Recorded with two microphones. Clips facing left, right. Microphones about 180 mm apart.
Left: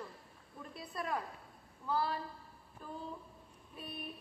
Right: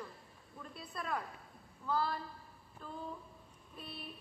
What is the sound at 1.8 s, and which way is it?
A woman's voice, 15° left (ahead or behind).